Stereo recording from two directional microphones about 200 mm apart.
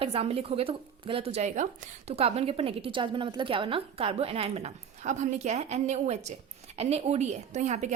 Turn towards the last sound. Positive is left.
turn(degrees=-35)  # may be behind; listen again after turning